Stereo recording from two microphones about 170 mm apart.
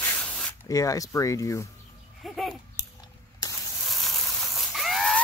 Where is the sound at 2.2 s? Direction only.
Centre (ahead or behind).